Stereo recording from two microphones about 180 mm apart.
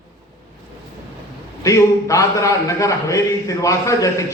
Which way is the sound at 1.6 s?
15° left (ahead or behind).